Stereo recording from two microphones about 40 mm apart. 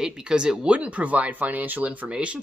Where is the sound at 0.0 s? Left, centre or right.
Centre.